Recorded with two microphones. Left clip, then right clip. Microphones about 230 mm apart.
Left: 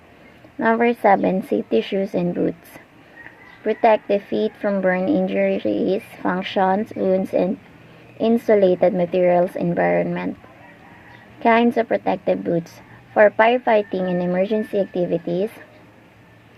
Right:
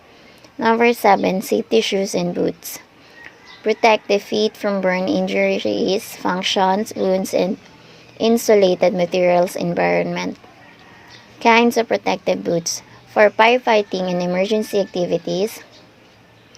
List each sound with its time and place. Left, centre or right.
0.6 s a woman's voice: right
11.3 s a woman's voice: right